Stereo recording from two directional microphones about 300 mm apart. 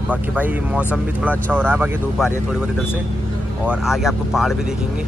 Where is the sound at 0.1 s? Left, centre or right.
Centre.